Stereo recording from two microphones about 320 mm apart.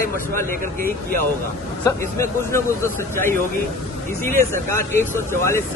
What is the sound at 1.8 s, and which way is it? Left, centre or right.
Speech, centre.